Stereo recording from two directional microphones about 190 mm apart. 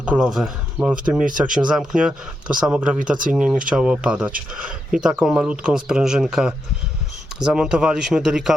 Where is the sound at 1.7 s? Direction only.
5° right (ahead or behind).